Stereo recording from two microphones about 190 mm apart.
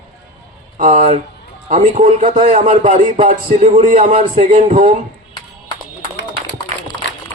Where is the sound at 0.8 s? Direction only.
40° right (ahead or behind).